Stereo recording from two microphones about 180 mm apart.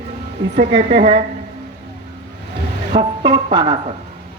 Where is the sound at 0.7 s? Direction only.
30° right (ahead or behind).